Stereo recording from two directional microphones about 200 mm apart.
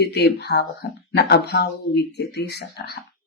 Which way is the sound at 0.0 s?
55° left (ahead or behind).